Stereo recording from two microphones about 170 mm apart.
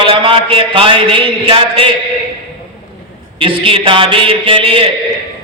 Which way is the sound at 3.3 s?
30° right (ahead or behind).